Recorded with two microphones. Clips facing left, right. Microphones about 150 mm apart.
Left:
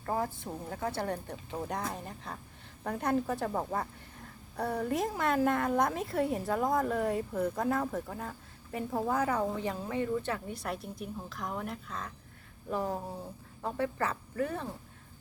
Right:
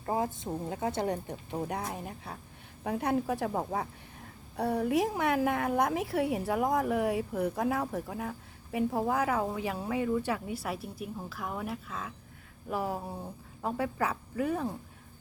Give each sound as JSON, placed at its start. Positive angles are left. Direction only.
{"t": 0.0, "sound": "a woman's voice", "side_deg": -20}